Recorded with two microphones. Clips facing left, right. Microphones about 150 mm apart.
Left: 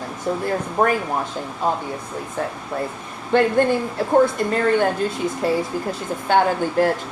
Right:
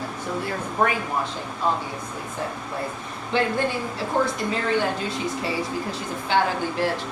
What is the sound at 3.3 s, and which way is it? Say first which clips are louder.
Speech: left 6 dB; 50° left (ahead or behind).